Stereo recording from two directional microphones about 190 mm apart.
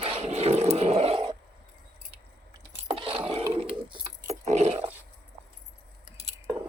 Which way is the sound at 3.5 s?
30° right (ahead or behind).